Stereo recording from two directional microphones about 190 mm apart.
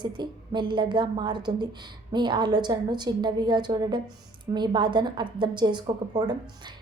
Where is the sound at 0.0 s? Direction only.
25° right (ahead or behind).